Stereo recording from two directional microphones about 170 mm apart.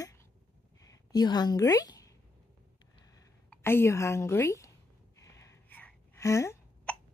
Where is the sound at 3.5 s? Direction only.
15° left (ahead or behind).